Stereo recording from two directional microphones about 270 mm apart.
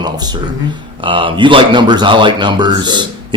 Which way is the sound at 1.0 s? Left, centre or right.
Centre.